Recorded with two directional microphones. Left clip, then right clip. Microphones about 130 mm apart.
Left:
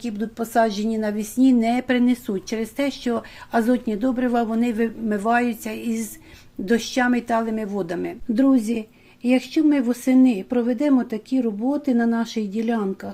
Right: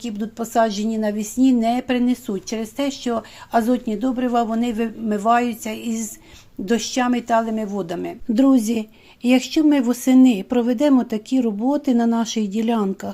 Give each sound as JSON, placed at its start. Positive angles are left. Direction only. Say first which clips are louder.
{"t": 0.0, "sound": "speech", "louder": "even", "side_deg": -15}
{"t": 8.3, "sound": "a woman's voice", "louder": "right 3 dB", "side_deg": -25}